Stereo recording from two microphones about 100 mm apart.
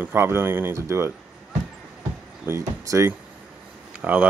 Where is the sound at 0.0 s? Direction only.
25° right (ahead or behind).